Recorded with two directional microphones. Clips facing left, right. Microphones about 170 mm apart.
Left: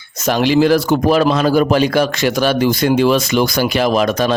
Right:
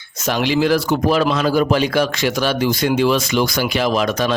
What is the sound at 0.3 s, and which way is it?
A man's voice, 40° left (ahead or behind).